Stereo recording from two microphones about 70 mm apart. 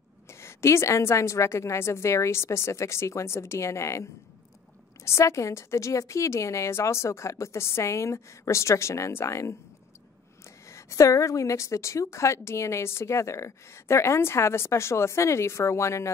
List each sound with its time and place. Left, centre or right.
0.3 s a woman's voice: left
10.7 s a woman's voice: left